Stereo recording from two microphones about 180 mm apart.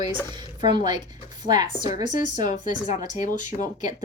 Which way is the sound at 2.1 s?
45° left (ahead or behind).